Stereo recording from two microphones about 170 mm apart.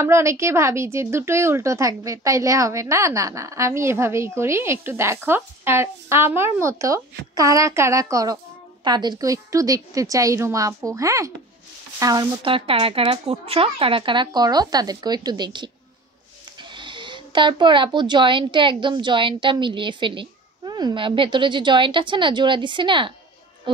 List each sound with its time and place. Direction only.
0.0 s a woman's voice: 15° right (ahead or behind)